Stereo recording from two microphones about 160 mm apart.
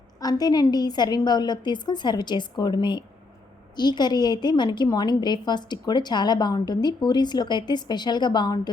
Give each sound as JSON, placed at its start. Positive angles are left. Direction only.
{"t": 0.2, "sound": "a woman's voice", "side_deg": 25}